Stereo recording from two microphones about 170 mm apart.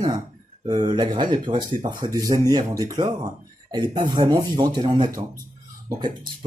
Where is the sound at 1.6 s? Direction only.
50° right (ahead or behind).